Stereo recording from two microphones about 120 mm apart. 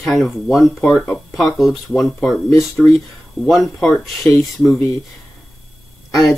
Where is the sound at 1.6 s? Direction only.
Centre (ahead or behind).